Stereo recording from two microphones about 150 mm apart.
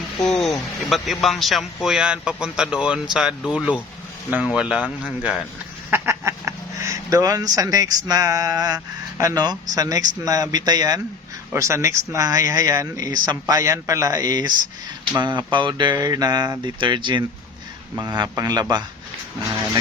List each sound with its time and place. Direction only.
0.2 s a man's voice: 5° left (ahead or behind)
5.9 s speech: 15° right (ahead or behind)